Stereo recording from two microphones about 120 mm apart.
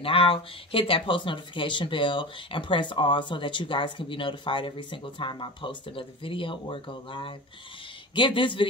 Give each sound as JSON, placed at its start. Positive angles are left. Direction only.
{"t": 0.0, "sound": "speech", "side_deg": 50}